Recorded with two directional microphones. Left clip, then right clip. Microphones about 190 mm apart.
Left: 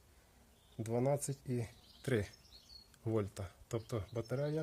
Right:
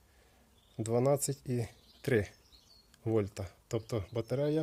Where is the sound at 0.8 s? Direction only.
40° right (ahead or behind).